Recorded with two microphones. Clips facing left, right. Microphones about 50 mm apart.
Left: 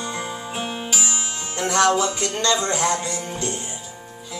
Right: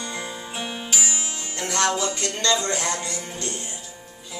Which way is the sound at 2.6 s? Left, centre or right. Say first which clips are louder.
Left 4 dB; left.